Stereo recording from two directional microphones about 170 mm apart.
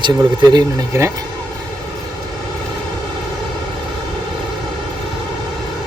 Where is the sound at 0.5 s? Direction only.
15° right (ahead or behind).